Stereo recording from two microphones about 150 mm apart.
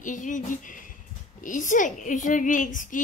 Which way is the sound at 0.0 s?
60° left (ahead or behind).